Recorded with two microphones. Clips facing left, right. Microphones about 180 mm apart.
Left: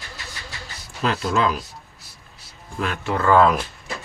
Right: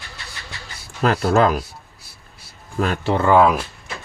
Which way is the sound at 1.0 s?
45° right (ahead or behind).